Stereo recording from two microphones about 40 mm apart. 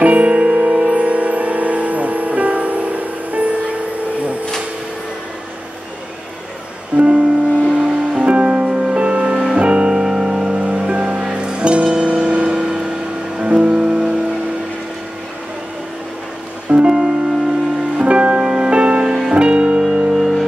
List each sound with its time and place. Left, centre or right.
0.0 s music: right
7.0 s music: right
10.0 s music: centre
10.6 s music: right
12.5 s vehicle: centre
13.4 s music: right
16.7 s music: centre
17.9 s music: right
18.4 s music: centre
20.2 s music: centre